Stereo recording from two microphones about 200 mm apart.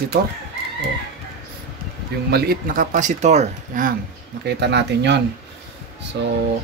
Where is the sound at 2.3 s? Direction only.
50° right (ahead or behind).